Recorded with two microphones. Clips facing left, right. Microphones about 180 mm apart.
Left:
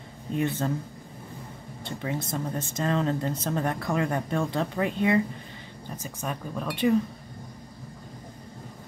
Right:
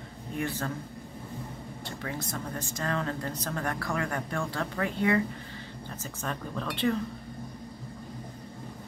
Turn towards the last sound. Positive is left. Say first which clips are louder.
# left 5 dB
turn(degrees=10)  # may be behind; listen again after turning